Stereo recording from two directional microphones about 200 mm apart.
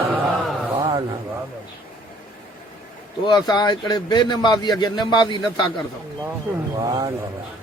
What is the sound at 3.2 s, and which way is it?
A man's voice, 20° left (ahead or behind).